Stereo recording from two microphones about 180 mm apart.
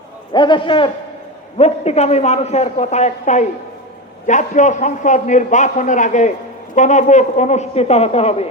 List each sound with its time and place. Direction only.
0.3 s a man's voice: 25° left (ahead or behind)